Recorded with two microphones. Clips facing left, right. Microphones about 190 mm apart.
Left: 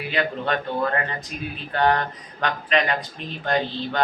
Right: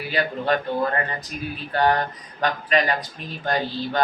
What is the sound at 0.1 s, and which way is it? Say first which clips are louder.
Mantra: right 2 dB; 40° right (ahead or behind).